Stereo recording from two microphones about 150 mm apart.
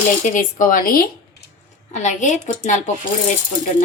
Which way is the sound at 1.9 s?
50° left (ahead or behind).